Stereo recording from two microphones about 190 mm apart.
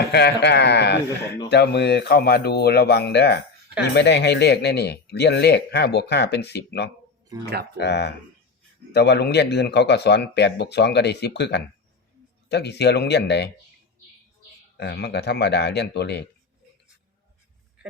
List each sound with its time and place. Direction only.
0.1 s speech: 60° left (ahead or behind)
7.3 s speech: 15° right (ahead or behind)
7.8 s speech: 60° left (ahead or behind)
14.8 s speech: 60° left (ahead or behind)